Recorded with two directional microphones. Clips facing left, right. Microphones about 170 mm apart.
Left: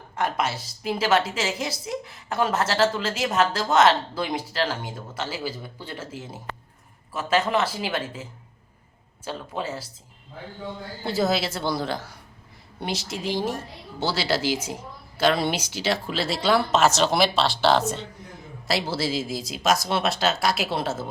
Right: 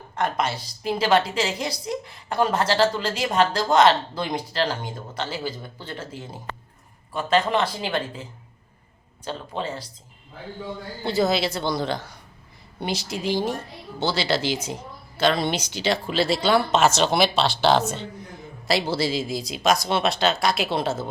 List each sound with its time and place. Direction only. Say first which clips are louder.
0.2 s a woman's voice: right 1 dB; 5° left (ahead or behind)
11.0 s a woman's voice: right 2 dB; centre (ahead or behind)